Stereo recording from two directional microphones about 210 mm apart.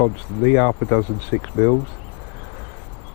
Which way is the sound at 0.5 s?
20° left (ahead or behind).